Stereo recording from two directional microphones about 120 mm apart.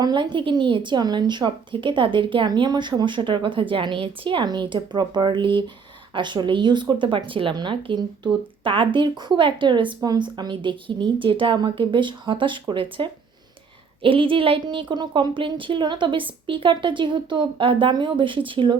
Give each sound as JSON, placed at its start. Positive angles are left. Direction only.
{"t": 0.0, "sound": "a woman's voice", "side_deg": -40}